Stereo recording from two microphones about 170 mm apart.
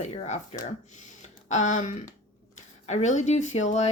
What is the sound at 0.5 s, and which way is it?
Speech, 40° left (ahead or behind).